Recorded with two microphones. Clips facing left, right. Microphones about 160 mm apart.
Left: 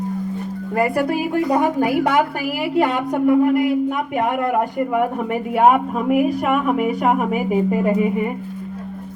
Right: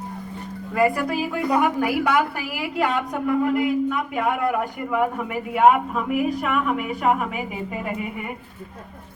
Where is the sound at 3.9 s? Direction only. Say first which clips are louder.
Left 3 dB; 55° left (ahead or behind).